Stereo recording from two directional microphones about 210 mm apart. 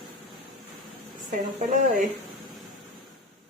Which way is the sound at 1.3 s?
35° right (ahead or behind).